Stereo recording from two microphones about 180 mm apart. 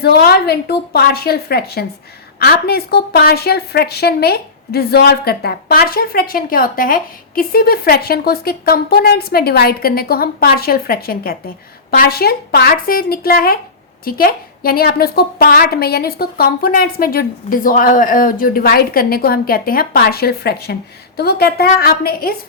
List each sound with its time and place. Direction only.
0.0 s a woman's voice: 60° left (ahead or behind)